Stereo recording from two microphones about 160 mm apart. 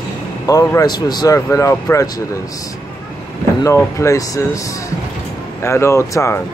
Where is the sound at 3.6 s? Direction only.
20° left (ahead or behind).